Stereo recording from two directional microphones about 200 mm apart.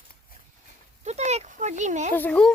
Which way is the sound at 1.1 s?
35° right (ahead or behind).